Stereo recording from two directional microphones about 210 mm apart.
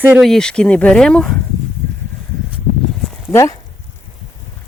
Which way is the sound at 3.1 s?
15° left (ahead or behind).